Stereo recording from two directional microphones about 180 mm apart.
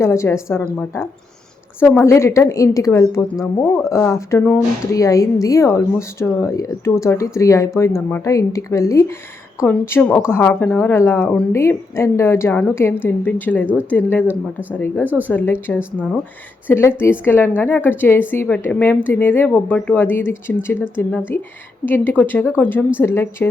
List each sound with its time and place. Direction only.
0.0 s speech: 15° left (ahead or behind)
14.3 s speech: 10° right (ahead or behind)
15.3 s speech: 10° left (ahead or behind)
15.8 s speech: 5° right (ahead or behind)
16.6 s speech: 15° left (ahead or behind)